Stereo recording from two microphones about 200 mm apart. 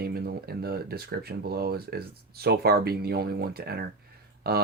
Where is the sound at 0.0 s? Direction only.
50° right (ahead or behind).